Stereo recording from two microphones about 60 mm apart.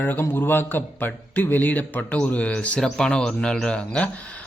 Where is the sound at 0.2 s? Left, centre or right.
Left.